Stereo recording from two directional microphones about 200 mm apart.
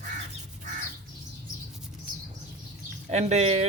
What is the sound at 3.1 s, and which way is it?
Speech, 35° right (ahead or behind).